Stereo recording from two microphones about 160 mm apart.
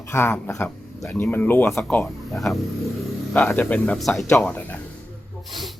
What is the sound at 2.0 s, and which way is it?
Mantra, centre (ahead or behind).